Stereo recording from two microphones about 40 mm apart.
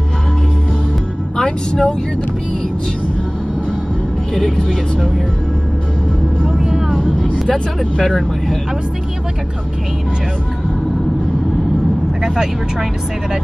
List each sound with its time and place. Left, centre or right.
1.3 s speech: left
6.4 s vehicle: centre
7.4 s speech: centre